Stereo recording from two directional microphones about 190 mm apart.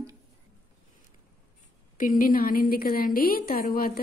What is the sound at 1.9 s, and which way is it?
A woman's voice, 45° left (ahead or behind).